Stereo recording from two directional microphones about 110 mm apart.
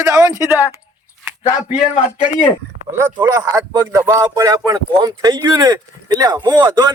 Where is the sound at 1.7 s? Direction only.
80° left.